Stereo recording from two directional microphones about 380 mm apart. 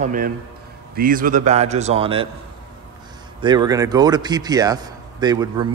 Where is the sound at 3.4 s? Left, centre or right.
Centre.